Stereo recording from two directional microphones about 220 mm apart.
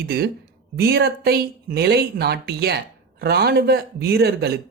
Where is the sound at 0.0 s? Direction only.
45° right (ahead or behind).